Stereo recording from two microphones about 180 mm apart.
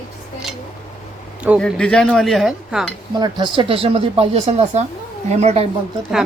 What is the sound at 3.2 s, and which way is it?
Speech, 25° right (ahead or behind).